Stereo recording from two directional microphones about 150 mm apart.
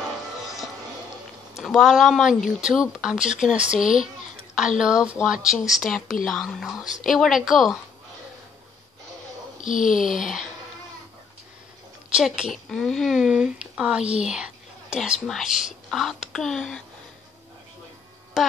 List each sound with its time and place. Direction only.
1.6 s speech: centre (ahead or behind)
9.7 s speech: 60° left (ahead or behind)
9.9 s speech: 5° right (ahead or behind)
12.1 s speech: 5° right (ahead or behind)